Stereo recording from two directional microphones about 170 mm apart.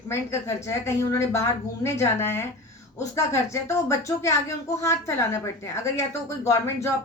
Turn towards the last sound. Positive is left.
turn(degrees=15)  # may be behind; listen again after turning